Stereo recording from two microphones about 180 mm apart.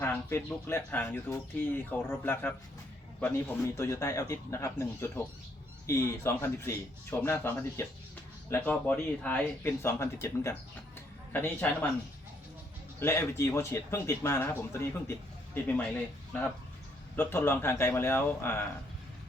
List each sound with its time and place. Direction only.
0.0 s speech: 15° left (ahead or behind)
3.8 s speech: 15° left (ahead or behind)
13.0 s speech: 15° left (ahead or behind)
16.3 s speech: 5° left (ahead or behind)